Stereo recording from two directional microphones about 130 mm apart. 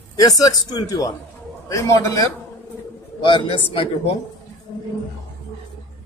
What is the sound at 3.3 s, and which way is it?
Speech, 40° left (ahead or behind).